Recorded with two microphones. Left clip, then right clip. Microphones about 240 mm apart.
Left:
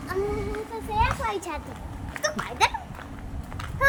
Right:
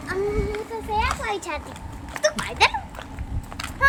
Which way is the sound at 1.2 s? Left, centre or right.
Centre.